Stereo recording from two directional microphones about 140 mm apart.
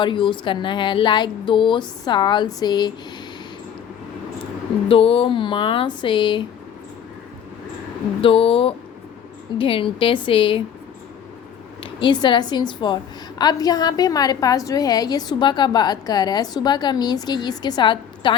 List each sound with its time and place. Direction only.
0.0 s a woman's voice: 35° left (ahead or behind)
4.9 s a woman's voice: 40° left (ahead or behind)
8.2 s a woman's voice: 40° left (ahead or behind)
11.8 s a woman's voice: 35° left (ahead or behind)